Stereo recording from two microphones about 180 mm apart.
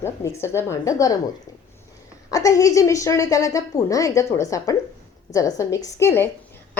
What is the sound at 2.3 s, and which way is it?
A woman's voice, 20° left (ahead or behind).